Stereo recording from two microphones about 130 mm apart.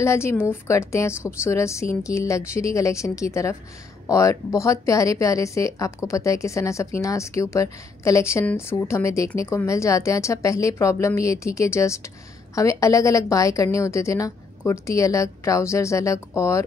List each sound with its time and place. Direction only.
0.0 s speech: 20° left (ahead or behind)